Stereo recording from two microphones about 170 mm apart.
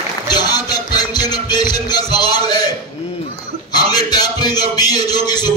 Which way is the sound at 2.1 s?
25° left (ahead or behind).